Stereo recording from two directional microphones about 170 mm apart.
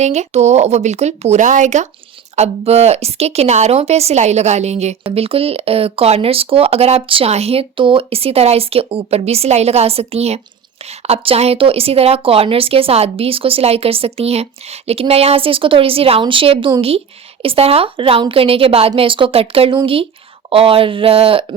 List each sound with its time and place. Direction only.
0.0 s a woman's voice: 40° right (ahead or behind)